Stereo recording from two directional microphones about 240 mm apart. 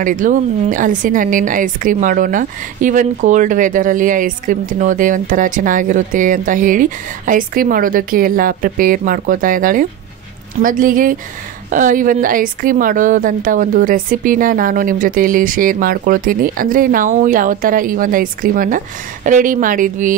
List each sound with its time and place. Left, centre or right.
0.0 s speech: right